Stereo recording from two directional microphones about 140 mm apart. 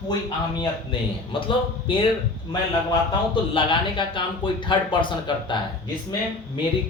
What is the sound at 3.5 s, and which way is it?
Speech, 35° left (ahead or behind).